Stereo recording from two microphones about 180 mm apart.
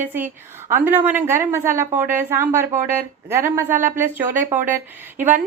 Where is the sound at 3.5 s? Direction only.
15° right (ahead or behind).